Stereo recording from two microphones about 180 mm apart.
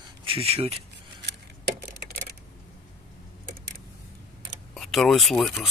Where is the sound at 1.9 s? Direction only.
60° right (ahead or behind).